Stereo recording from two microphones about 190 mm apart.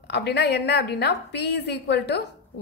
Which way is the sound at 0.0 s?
60° left (ahead or behind).